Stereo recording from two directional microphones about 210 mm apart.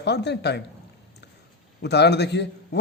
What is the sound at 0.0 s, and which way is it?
Speech, 55° left (ahead or behind).